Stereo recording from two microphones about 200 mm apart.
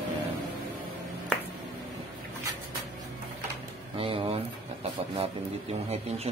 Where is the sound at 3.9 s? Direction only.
25° right (ahead or behind).